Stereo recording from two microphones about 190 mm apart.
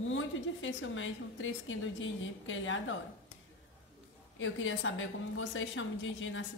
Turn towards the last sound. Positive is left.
turn(degrees=85)